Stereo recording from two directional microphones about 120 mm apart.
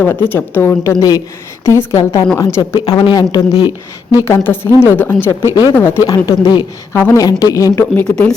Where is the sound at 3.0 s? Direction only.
35° left (ahead or behind).